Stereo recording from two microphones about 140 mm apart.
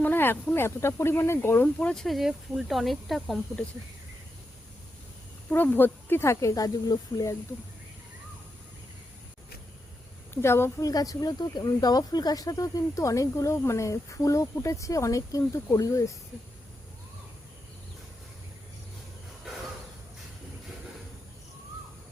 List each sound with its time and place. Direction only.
0.0 s speech: 15° left (ahead or behind)
5.5 s speech: 15° left (ahead or behind)
10.3 s speech: 15° left (ahead or behind)